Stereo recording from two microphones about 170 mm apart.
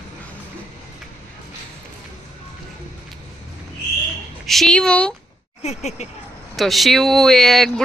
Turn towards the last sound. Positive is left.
turn(degrees=0)  # may be behind; listen again after turning